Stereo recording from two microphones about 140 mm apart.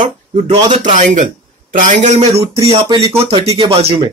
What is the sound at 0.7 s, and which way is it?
Speech, 60° right (ahead or behind).